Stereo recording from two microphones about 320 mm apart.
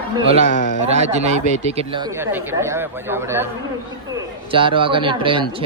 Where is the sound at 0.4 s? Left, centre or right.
Left.